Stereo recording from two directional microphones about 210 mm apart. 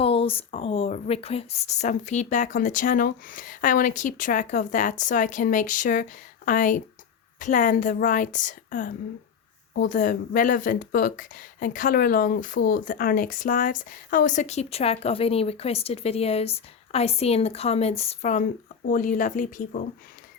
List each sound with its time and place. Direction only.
0.0 s speech: 25° left (ahead or behind)